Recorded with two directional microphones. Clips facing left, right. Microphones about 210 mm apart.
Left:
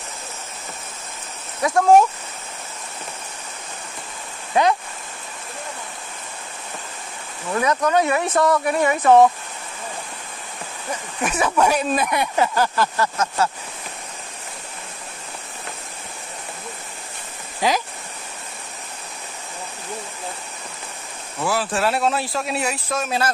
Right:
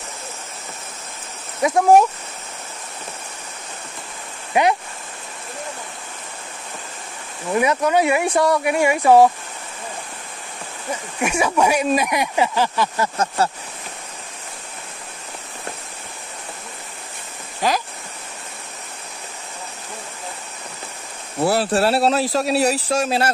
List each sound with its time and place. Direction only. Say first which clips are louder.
1.6 s speech: right 1 dB; 20° right (ahead or behind)
7.5 s speech: right 1 dB; 15° right (ahead or behind)
11.1 s speech: right 1 dB; 10° right (ahead or behind)
13.2 s speech: right 1 dB; 30° right (ahead or behind)
21.4 s speech: right 5 dB; 35° right (ahead or behind)